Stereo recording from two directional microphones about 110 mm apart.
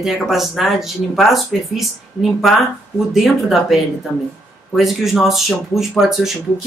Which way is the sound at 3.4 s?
Centre (ahead or behind).